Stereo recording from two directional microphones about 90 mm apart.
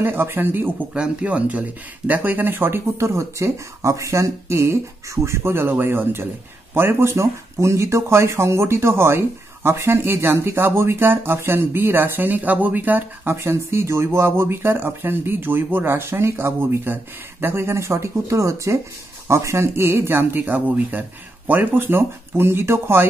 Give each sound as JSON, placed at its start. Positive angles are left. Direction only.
{"t": 0.0, "sound": "speech", "side_deg": -25}